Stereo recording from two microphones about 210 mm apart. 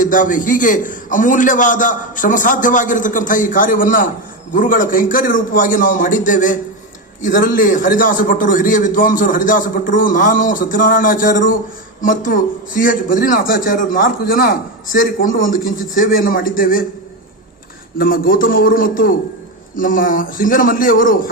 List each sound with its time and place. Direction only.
0.0 s a man's voice: 40° left (ahead or behind)
17.9 s a man's voice: 45° left (ahead or behind)